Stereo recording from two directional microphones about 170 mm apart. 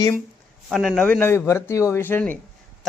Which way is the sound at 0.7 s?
Centre (ahead or behind).